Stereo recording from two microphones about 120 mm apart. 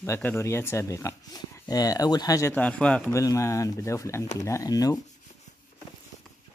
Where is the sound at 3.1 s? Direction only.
25° left (ahead or behind).